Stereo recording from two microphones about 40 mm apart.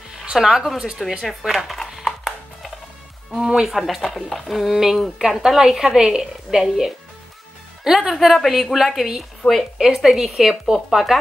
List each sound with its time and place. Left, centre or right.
0.2 s speech: centre
1.0 s speech: centre
2.0 s music: centre
3.3 s speech: centre
4.6 s a woman's voice: centre
9.4 s speech: left
9.8 s a woman's voice: centre